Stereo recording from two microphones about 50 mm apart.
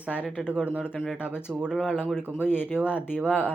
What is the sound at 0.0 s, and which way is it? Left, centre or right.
Speech, right.